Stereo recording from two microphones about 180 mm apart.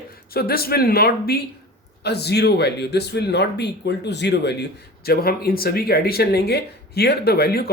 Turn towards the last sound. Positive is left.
turn(degrees=60)  # may be behind; listen again after turning